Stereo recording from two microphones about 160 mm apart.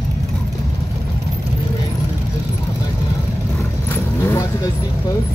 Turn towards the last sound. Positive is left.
turn(degrees=15)  # may be behind; listen again after turning